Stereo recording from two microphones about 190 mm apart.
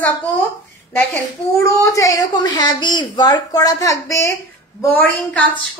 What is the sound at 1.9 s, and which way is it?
A woman's voice, 15° left (ahead or behind).